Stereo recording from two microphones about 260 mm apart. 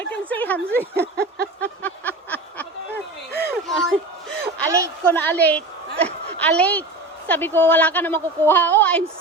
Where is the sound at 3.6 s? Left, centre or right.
Centre.